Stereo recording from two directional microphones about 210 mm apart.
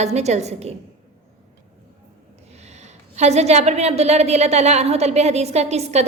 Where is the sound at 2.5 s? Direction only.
30° right (ahead or behind).